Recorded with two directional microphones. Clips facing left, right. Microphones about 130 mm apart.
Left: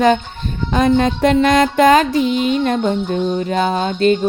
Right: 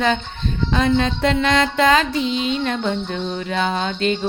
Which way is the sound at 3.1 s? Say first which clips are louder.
Left 6 dB; 45° left (ahead or behind).